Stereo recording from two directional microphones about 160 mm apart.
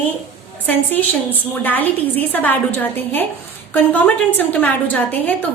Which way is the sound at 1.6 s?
10° left (ahead or behind).